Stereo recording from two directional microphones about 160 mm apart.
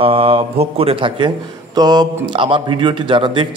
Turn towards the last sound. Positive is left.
turn(degrees=-30)  # may be behind; listen again after turning